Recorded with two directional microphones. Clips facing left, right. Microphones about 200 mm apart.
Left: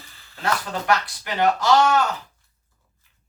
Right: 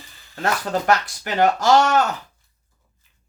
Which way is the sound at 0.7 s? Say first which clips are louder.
Right 3 dB; 45° right (ahead or behind).